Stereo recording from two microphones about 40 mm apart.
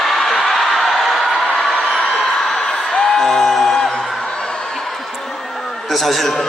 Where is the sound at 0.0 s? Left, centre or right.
Centre.